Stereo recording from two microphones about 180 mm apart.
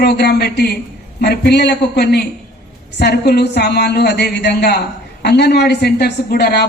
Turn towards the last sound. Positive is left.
turn(degrees=65)  # may be behind; listen again after turning